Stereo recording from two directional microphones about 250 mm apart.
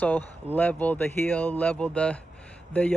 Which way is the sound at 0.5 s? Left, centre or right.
Centre.